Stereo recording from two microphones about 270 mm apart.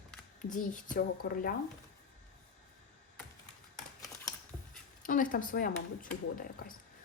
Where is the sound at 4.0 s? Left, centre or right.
Centre.